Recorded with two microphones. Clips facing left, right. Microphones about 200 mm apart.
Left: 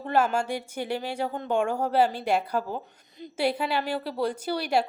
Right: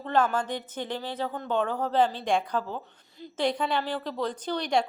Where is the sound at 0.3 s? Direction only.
10° left (ahead or behind).